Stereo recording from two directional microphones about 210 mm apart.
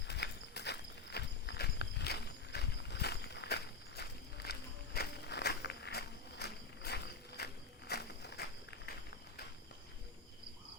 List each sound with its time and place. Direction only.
0.1 s horse: 55° left (ahead or behind)
4.9 s walk: 50° left (ahead or behind)